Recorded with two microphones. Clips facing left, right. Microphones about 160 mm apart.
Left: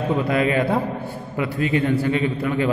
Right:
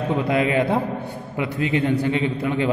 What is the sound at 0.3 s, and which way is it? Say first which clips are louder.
A man's voice: right 1 dB; 20° right (ahead or behind).